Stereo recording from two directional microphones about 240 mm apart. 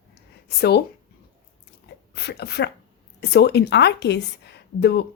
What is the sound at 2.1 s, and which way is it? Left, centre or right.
A woman's voice, left.